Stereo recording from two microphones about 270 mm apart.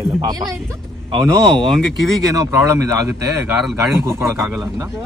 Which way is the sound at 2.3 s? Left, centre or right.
Centre.